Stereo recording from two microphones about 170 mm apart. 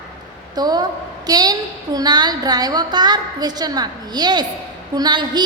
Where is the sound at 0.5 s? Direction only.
25° right (ahead or behind).